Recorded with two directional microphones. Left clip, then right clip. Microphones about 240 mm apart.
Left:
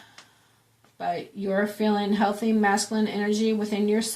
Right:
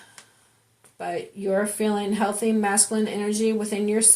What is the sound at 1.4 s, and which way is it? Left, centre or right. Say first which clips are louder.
Speech: right 1 dB; right.